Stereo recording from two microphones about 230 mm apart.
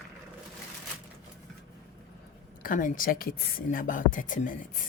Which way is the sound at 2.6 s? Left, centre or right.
Left.